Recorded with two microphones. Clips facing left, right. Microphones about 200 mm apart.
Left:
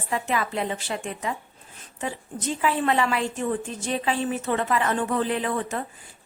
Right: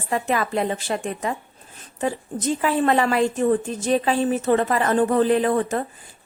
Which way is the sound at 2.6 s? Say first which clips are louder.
Right 3 dB; 45° right (ahead or behind).